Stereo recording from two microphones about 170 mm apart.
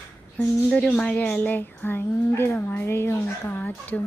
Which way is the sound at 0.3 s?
5° left (ahead or behind).